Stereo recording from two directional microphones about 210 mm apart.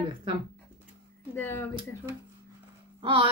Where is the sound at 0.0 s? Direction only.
25° right (ahead or behind).